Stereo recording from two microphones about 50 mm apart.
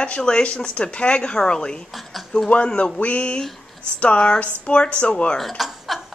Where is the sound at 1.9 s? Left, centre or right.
Centre.